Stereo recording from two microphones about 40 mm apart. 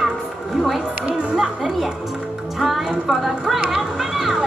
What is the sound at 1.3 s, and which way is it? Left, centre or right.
A woman's voice, centre.